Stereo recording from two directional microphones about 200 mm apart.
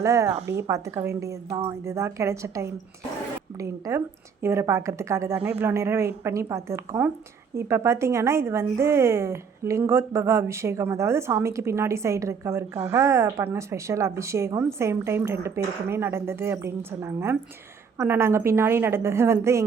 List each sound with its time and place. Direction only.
0.0 s a woman's voice: 15° right (ahead or behind)